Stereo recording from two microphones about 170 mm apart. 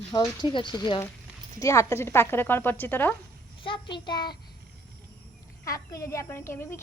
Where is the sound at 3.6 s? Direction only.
30° left (ahead or behind).